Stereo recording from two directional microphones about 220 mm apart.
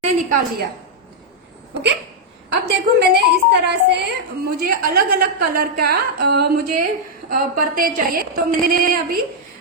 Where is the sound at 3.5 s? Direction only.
50° right (ahead or behind).